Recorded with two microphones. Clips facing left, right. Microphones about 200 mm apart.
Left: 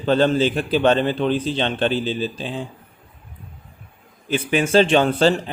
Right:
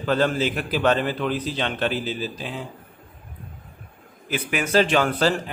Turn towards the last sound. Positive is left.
turn(degrees=25)  # may be behind; listen again after turning